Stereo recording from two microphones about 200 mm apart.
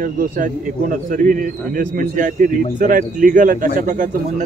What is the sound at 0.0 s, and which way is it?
A man's voice, 40° right (ahead or behind).